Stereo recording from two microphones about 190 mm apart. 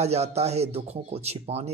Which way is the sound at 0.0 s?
35° right (ahead or behind).